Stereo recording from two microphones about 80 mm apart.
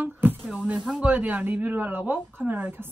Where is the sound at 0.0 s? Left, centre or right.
Right.